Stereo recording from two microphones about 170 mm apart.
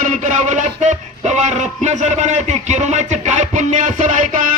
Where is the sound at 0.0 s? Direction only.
45° right (ahead or behind).